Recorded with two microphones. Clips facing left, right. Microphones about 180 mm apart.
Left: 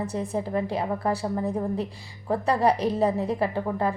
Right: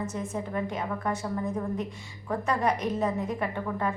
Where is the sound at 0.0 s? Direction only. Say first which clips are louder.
Left 4 dB; 35° left (ahead or behind).